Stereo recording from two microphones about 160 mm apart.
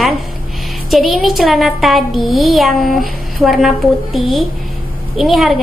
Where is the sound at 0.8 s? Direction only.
Centre (ahead or behind).